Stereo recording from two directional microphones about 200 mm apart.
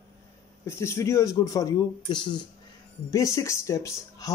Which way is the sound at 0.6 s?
15° left (ahead or behind).